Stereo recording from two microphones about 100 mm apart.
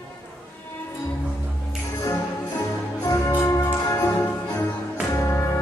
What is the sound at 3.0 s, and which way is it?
Music, 30° left (ahead or behind).